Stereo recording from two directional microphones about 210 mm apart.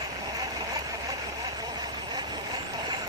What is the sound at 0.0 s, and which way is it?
Vehicle, 20° right (ahead or behind).